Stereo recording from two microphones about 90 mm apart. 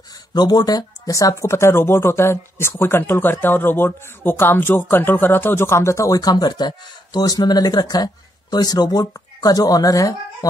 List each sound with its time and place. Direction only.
0.3 s speech: 50° left (ahead or behind)